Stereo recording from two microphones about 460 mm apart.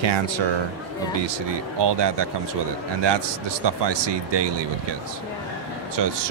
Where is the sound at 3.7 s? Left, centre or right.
Right.